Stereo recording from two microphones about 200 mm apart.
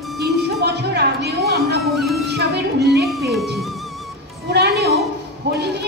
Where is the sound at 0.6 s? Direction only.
55° right (ahead or behind).